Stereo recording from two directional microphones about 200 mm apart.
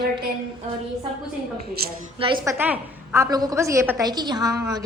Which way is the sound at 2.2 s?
25° right (ahead or behind).